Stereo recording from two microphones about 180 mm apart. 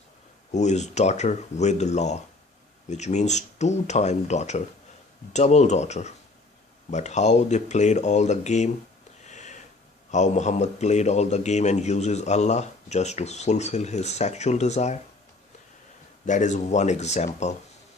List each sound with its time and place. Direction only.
0.5 s a man's voice: 40° left (ahead or behind)
9.2 s a sound: 40° left (ahead or behind)
10.1 s a man's voice: 40° left (ahead or behind)
16.2 s a man's voice: 45° left (ahead or behind)